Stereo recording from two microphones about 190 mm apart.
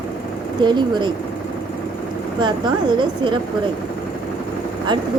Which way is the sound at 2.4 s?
25° right (ahead or behind).